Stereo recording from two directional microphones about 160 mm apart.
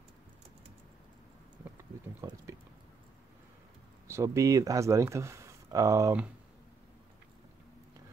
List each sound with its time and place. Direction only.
2.2 s speech: 20° right (ahead or behind)
4.1 s speech: 20° right (ahead or behind)